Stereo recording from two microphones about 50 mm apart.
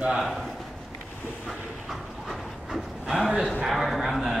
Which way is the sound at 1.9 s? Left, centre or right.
Centre.